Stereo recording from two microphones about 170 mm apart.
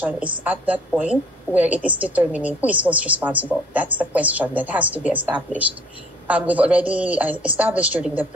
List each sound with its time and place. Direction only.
0.0 s a woman's voice: 10° right (ahead or behind)